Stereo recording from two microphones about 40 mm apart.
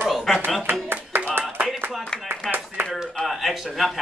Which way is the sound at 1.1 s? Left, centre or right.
Right.